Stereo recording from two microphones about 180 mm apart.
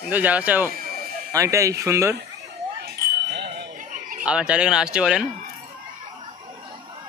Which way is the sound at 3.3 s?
65° right (ahead or behind).